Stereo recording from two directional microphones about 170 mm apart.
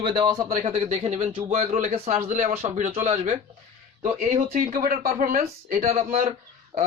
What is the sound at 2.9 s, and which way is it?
Speech, 40° right (ahead or behind).